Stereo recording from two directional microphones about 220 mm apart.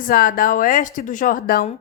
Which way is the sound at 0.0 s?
40° left (ahead or behind).